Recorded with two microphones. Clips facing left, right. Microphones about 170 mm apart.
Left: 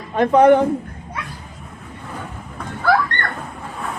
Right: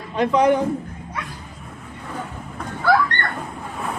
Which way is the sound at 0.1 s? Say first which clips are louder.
Left 5 dB; 55° left (ahead or behind).